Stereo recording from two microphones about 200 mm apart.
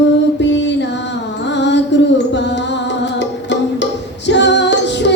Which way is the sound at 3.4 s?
60° left (ahead or behind).